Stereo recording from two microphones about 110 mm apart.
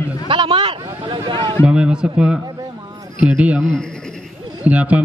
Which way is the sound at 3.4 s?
10° right (ahead or behind).